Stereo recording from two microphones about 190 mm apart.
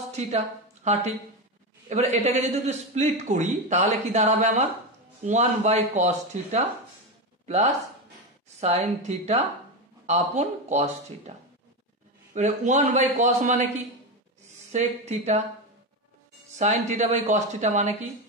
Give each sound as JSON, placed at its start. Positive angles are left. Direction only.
{"t": 0.1, "sound": "a woman's voice", "side_deg": -35}
{"t": 12.4, "sound": "a man's voice", "side_deg": -40}
{"t": 14.7, "sound": "a man's voice", "side_deg": -35}
{"t": 16.5, "sound": "a man's voice", "side_deg": -40}